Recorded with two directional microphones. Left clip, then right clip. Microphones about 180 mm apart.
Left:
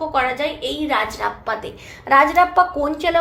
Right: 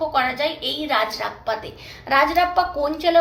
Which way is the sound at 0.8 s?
45° left (ahead or behind).